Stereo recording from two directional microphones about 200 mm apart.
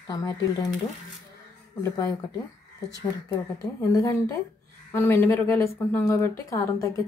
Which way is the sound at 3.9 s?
15° left (ahead or behind).